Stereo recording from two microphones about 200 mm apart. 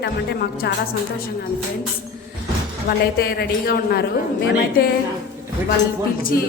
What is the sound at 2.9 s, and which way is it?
A woman's voice, 50° left (ahead or behind).